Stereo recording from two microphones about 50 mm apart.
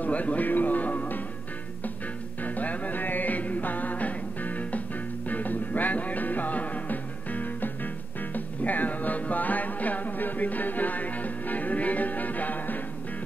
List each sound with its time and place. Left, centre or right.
0.0 s music: left
2.4 s music: left